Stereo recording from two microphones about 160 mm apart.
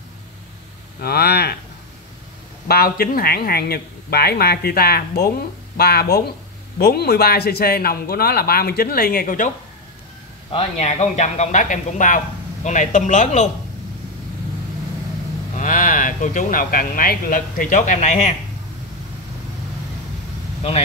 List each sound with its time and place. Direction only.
1.0 s speech: 85° left
2.7 s a man's voice: 70° left (ahead or behind)
10.5 s a man's voice: 45° left (ahead or behind)
15.5 s speech: 55° left (ahead or behind)